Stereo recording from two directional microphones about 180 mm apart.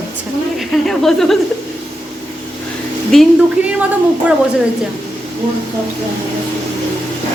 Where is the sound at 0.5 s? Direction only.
Centre (ahead or behind).